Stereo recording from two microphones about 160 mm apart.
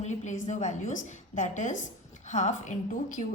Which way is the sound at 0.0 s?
45° left (ahead or behind).